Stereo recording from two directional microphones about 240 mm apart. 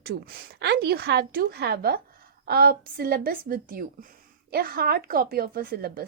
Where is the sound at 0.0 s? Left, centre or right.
Right.